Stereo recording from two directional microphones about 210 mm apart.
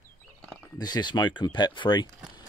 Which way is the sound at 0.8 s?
20° left (ahead or behind).